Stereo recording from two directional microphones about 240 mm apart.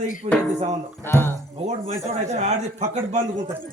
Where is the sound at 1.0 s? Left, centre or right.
Centre.